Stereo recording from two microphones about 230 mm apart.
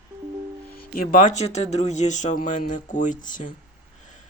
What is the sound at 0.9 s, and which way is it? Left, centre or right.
Speech, left.